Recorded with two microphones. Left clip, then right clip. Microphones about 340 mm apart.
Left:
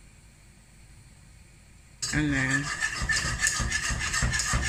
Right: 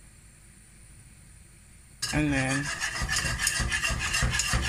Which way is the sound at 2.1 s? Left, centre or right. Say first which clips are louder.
Even; centre.